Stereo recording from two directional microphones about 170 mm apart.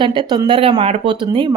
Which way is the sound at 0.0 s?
25° right (ahead or behind).